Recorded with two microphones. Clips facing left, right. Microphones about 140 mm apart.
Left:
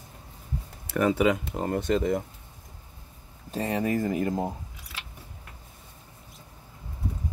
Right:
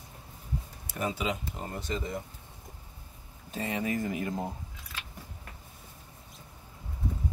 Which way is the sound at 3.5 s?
40° left (ahead or behind).